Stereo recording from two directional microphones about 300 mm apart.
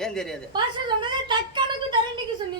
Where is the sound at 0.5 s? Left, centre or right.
Centre.